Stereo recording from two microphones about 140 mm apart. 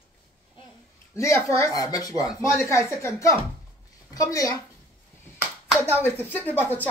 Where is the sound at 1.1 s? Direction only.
20° left (ahead or behind).